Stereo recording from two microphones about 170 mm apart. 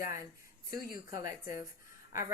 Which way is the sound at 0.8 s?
60° left (ahead or behind).